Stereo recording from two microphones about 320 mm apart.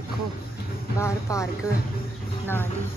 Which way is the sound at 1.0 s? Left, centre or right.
Centre.